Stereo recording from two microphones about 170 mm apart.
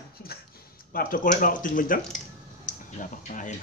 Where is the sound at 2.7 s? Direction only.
50° left (ahead or behind).